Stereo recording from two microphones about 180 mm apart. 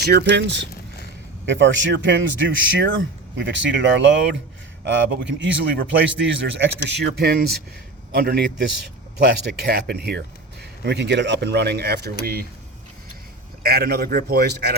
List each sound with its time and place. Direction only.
0.0 s speech: 65° right (ahead or behind)
1.5 s a man's voice: 90° right; by 12.5 s 55° right (ahead or behind)
13.6 s a man's voice: 60° right (ahead or behind)